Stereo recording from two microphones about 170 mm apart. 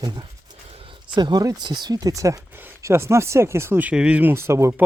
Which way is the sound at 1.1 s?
25° right (ahead or behind).